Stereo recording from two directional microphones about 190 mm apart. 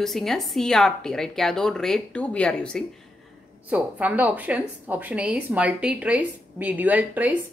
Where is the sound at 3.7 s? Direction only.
5° right (ahead or behind).